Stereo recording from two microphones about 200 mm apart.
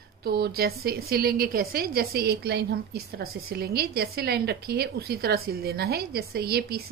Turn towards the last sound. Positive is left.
turn(degrees=-50)  # may be behind; listen again after turning